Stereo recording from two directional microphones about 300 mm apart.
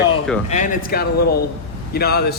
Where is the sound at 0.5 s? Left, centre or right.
Left.